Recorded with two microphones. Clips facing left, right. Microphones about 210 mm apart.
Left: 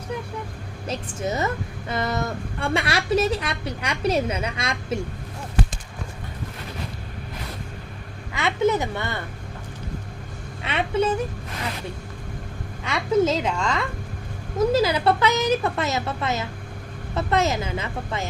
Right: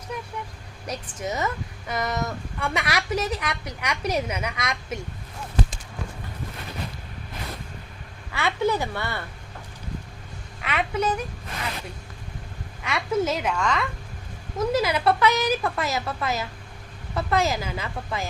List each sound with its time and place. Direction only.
0.9 s a woman's voice: 30° left (ahead or behind)
8.3 s a woman's voice: 20° left (ahead or behind)
10.6 s a woman's voice: 25° left (ahead or behind)
12.8 s a woman's voice: 25° left (ahead or behind)